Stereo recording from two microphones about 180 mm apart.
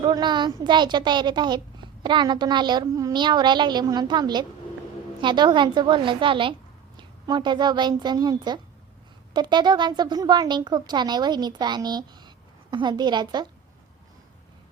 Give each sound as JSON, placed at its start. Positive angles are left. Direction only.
{"t": 0.0, "sound": "a woman's voice", "side_deg": -25}